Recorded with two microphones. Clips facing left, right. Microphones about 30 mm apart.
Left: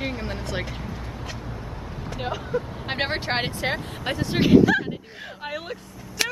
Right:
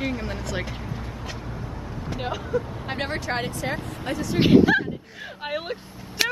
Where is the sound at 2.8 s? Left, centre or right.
Left.